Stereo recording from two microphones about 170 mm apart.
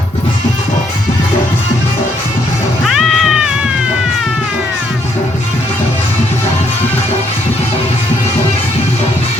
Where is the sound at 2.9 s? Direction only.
Centre (ahead or behind).